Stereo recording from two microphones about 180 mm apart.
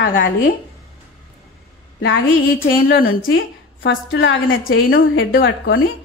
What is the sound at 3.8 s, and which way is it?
A woman's voice, 90° left.